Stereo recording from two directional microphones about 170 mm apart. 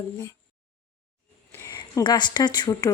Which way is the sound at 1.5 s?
20° left (ahead or behind).